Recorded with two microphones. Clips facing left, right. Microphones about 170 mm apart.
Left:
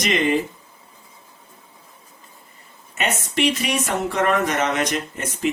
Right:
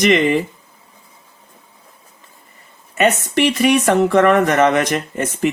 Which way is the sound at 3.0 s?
60° right (ahead or behind).